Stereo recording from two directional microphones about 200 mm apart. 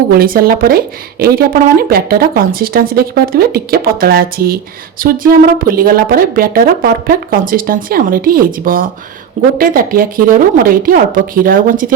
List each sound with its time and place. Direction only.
0.1 s speech: 45° right (ahead or behind)